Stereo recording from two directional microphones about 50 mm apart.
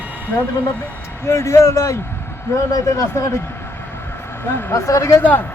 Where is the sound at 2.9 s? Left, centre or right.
Left.